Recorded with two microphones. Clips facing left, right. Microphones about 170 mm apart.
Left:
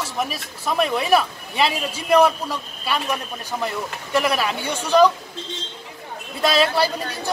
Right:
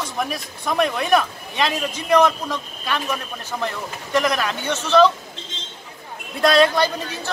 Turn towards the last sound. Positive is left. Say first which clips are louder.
# right 3 dB
turn(degrees=5)  # may be behind; listen again after turning